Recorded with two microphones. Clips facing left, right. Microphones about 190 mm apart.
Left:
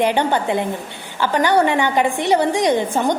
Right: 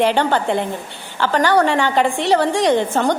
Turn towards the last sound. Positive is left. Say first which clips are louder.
# right 1 dB
turn(degrees=15)  # may be behind; listen again after turning